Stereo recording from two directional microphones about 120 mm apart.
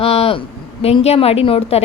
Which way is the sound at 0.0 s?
55° left (ahead or behind).